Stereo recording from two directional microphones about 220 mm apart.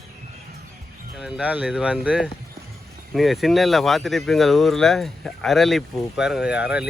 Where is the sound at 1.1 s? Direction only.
5° right (ahead or behind).